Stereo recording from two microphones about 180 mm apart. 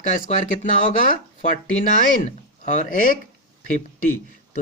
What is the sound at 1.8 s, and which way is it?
Speech, 45° left (ahead or behind).